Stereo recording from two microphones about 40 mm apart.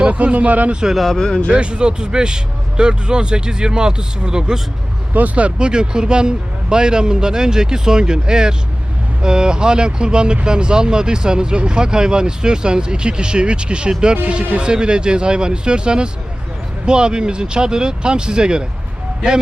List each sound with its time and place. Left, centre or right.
0.1 s speech: right
1.1 s speech: centre
1.5 s speech: right
5.1 s speech: right